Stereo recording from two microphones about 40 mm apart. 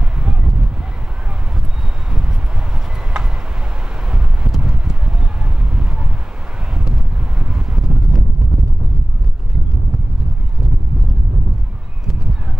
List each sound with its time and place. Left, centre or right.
0.2 s a sound: right
4.1 s clip-clop: right
5.6 s vehicle: right
6.8 s wind noise: centre